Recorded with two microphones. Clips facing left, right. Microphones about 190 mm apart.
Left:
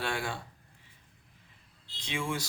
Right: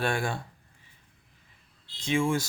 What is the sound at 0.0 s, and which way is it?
Speech, 50° right (ahead or behind).